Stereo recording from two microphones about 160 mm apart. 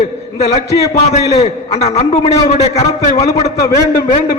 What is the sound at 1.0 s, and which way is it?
A man's voice, 40° left (ahead or behind).